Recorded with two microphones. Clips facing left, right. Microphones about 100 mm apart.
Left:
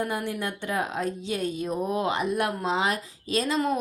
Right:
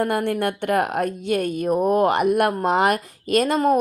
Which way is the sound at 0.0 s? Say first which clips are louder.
Right 8 dB; 60° right (ahead or behind).